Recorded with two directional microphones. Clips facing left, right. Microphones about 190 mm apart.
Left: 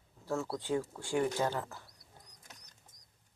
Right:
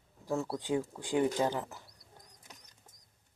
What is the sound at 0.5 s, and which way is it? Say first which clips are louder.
Speech: right 1 dB; 15° right (ahead or behind).